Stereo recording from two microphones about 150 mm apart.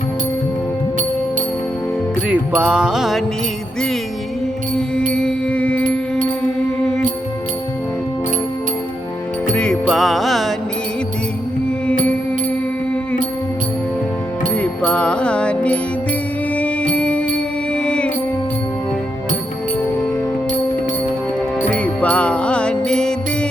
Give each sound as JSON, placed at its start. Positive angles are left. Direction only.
{"t": 2.2, "sound": "music", "side_deg": -10}
{"t": 5.1, "sound": "music", "side_deg": 5}
{"t": 9.8, "sound": "music", "side_deg": 0}
{"t": 14.5, "sound": "music", "side_deg": 10}
{"t": 16.9, "sound": "music", "side_deg": 10}
{"t": 21.7, "sound": "music", "side_deg": 10}